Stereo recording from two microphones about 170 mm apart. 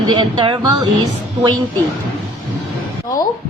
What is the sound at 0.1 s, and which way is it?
Speech, 30° right (ahead or behind).